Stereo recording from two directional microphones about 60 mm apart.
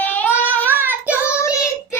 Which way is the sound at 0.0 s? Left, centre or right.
Left.